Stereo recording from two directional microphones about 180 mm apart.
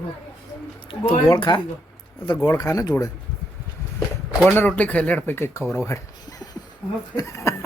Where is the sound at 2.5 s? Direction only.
20° left (ahead or behind).